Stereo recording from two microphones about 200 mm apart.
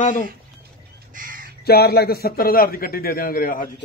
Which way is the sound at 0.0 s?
40° left (ahead or behind).